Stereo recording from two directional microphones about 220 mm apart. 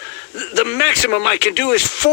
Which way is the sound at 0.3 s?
50° left (ahead or behind).